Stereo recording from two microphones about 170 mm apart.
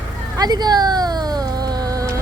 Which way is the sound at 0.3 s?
25° right (ahead or behind).